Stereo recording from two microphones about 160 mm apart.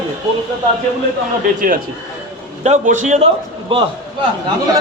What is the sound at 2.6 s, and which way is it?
A man's voice, 50° right (ahead or behind).